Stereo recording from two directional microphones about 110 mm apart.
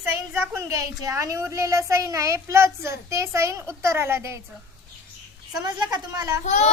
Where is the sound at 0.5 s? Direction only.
30° right (ahead or behind).